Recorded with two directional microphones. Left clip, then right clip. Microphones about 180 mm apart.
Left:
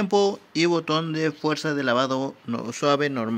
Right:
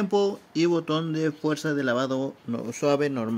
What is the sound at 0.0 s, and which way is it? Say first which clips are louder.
Speech: left 3 dB; 15° left (ahead or behind).